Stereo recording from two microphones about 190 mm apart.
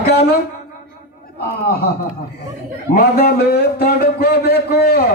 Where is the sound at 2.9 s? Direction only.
55° left (ahead or behind).